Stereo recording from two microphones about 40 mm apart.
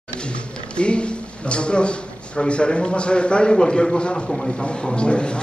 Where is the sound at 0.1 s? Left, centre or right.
Left.